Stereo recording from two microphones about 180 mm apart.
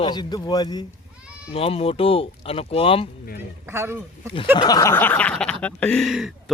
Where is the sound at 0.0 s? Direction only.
25° left (ahead or behind).